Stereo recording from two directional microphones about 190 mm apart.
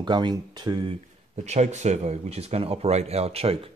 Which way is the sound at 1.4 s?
35° right (ahead or behind).